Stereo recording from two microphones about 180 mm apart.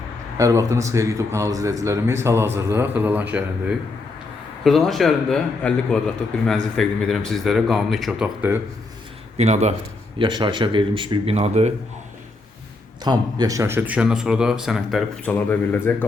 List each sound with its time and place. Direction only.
0.3 s a man's voice: 20° right (ahead or behind)
9.4 s speech: 40° right (ahead or behind)
10.2 s speech: 25° right (ahead or behind)
13.1 s speech: 20° right (ahead or behind); by 16.0 s 10° left (ahead or behind)